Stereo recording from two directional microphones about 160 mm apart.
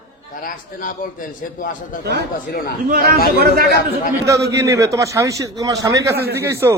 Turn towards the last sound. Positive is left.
turn(degrees=-15)  # may be behind; listen again after turning